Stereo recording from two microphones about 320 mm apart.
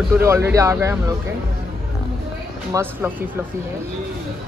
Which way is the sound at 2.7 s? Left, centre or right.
Centre.